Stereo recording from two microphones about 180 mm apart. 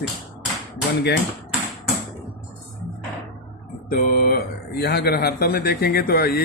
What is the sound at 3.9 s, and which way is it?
Speech, 55° left (ahead or behind).